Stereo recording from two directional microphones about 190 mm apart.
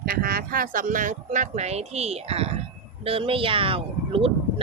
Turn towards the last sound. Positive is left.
turn(degrees=-30)  # may be behind; listen again after turning